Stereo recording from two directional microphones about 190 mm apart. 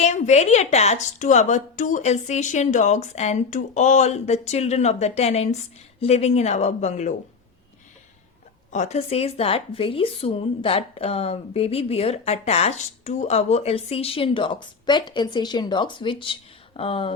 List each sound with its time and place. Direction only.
0.0 s speech: 35° left (ahead or behind)
8.7 s speech: 40° left (ahead or behind)